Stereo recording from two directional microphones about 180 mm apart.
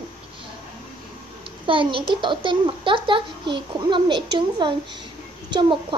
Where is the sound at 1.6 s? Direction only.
30° right (ahead or behind).